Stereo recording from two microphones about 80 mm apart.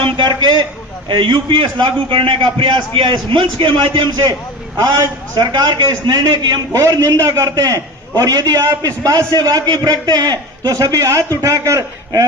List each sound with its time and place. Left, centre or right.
0.0 s a sound: right
1.0 s a man's voice: right
5.3 s a man's voice: right